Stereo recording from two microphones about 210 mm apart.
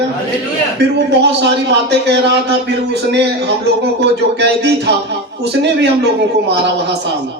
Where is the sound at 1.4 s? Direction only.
55° right (ahead or behind).